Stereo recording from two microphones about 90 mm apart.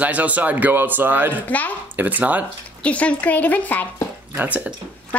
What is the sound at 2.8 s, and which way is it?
A woman's voice, 15° left (ahead or behind).